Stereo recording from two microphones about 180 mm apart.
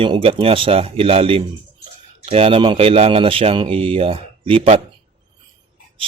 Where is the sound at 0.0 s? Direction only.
30° right (ahead or behind).